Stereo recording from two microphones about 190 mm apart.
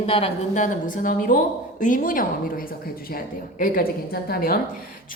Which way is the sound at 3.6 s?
50° left (ahead or behind).